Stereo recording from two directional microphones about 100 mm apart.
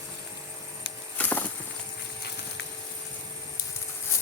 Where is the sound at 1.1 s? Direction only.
20° left (ahead or behind).